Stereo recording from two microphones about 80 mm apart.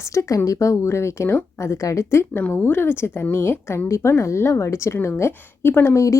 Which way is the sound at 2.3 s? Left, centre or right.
Left.